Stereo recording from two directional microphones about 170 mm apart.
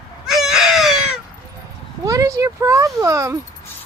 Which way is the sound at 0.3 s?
5° right (ahead or behind).